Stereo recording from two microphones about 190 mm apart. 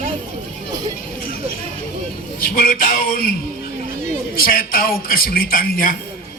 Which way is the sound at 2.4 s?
50° left (ahead or behind).